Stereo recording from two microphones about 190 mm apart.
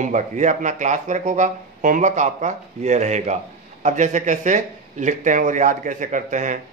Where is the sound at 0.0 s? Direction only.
40° right (ahead or behind).